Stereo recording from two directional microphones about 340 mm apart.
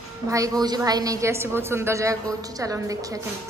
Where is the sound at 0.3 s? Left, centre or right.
Centre.